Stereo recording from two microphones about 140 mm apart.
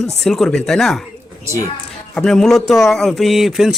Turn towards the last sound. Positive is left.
turn(degrees=0)  # may be behind; listen again after turning